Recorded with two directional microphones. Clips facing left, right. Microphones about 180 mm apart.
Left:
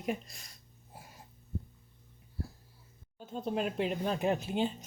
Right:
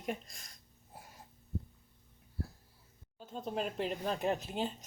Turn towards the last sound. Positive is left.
turn(degrees=0)  # may be behind; listen again after turning